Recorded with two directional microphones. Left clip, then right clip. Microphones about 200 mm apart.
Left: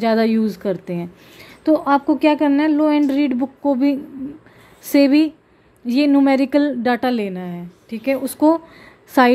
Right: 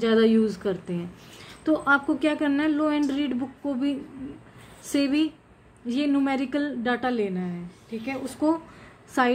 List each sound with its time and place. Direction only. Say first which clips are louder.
0.0 s a woman's voice: left 3 dB; 35° left (ahead or behind)